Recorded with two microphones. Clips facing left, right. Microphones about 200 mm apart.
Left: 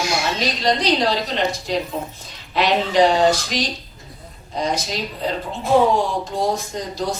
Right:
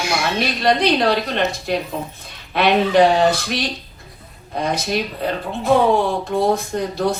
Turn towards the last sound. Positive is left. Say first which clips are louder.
# right 5 dB
turn(degrees=-60)  # may be behind; listen again after turning